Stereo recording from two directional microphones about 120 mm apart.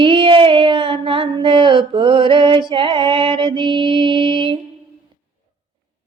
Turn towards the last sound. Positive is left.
turn(degrees=-45)  # may be behind; listen again after turning